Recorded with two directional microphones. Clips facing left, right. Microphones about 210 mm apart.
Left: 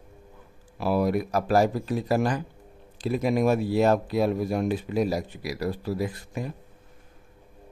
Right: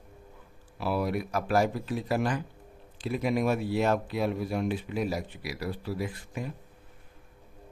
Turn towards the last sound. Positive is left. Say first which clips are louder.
# left 4 dB
turn(degrees=40)  # may be behind; listen again after turning